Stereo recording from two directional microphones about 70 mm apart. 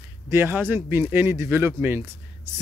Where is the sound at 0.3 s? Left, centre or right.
Right.